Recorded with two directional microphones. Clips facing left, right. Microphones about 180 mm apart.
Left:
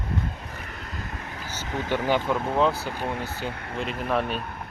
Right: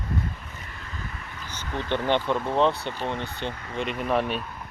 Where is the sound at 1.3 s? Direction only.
45° left (ahead or behind).